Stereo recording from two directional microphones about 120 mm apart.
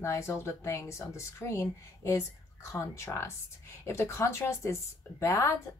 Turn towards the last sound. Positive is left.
turn(degrees=25)  # may be behind; listen again after turning